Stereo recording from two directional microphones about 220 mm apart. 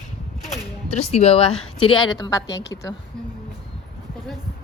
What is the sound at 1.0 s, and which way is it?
A woman's voice, 30° left (ahead or behind).